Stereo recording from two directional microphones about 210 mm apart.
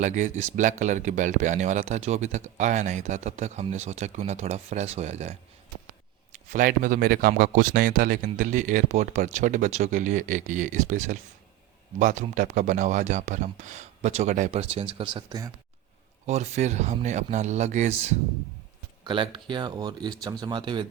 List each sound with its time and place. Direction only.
0.0 s speech: 35° right (ahead or behind); by 15.5 s 15° right (ahead or behind)
16.2 s speech: 30° right (ahead or behind)
19.0 s speech: 25° right (ahead or behind)